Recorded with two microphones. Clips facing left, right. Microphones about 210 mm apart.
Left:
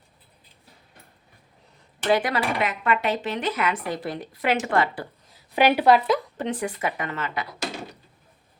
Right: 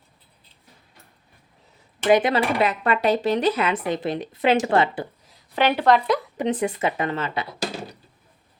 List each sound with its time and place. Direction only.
2.0 s speech: 20° right (ahead or behind)
5.5 s speech: 10° left (ahead or behind)
6.3 s speech: 20° right (ahead or behind)